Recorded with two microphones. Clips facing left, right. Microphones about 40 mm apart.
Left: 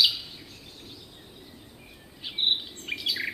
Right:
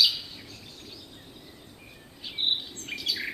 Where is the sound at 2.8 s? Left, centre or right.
Left.